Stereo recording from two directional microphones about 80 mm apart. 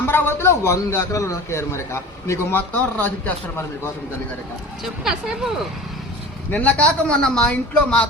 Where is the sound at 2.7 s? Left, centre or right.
Left.